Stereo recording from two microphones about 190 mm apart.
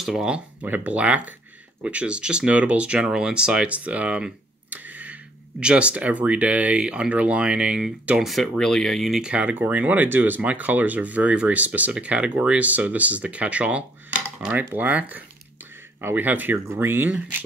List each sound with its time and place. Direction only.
0.0 s speech: 5° right (ahead or behind)